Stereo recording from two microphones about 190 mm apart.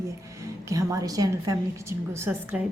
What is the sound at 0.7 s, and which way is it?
A woman's voice, 15° right (ahead or behind).